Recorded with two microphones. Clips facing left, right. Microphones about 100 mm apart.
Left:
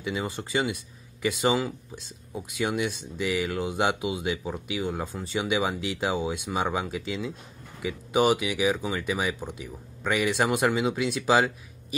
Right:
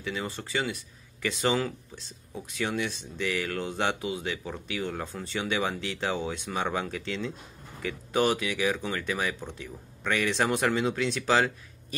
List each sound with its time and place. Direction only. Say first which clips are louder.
0.0 s speech: left 3 dB; 15° left (ahead or behind)